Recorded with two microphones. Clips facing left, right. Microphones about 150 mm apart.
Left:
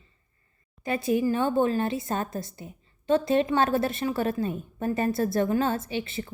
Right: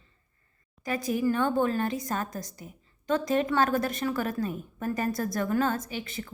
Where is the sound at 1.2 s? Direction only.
15° left (ahead or behind).